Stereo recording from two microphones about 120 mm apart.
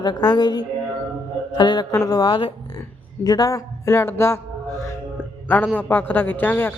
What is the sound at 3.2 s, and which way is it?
Speech, 30° left (ahead or behind).